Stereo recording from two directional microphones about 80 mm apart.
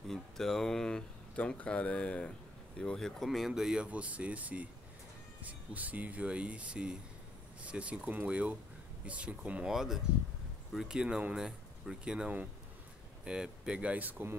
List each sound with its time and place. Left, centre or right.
0.1 s speech: centre; by 14.3 s right